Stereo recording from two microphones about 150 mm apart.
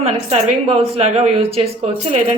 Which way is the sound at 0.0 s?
45° right (ahead or behind).